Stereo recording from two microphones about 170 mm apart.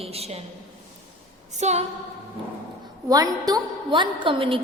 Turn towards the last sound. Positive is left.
turn(degrees=-30)  # may be behind; listen again after turning